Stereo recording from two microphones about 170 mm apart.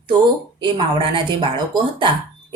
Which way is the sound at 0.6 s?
30° right (ahead or behind).